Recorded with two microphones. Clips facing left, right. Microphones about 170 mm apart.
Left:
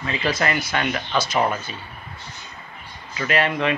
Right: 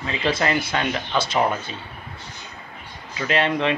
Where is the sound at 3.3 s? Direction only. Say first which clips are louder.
Even; 25° right (ahead or behind).